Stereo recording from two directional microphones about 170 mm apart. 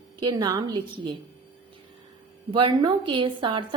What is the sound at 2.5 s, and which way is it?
A woman's voice, 30° right (ahead or behind).